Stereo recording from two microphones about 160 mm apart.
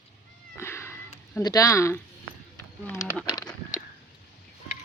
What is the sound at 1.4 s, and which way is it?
Speech, 20° left (ahead or behind).